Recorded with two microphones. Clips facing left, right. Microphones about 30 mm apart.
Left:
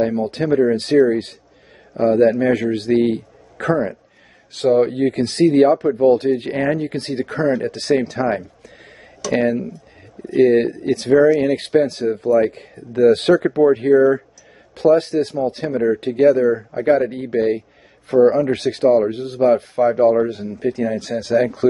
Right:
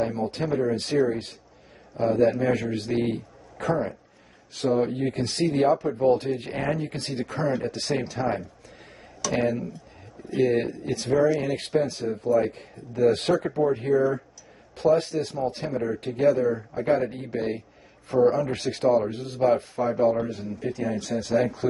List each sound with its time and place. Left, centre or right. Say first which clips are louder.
0.2 s a man's voice: left 8 dB; left
4.6 s a man's voice: left 8 dB; left
4.9 s speech: left 9 dB; left
6.8 s a man's voice: left 7 dB; left
9.2 s speech: left 7 dB; centre
10.4 s a man's voice: left 9 dB; left
16.0 s speech: left 7 dB; left
17.2 s a man's voice: left 10 dB; left
19.8 s speech: left 10 dB; left
20.3 s speech: left 8 dB; left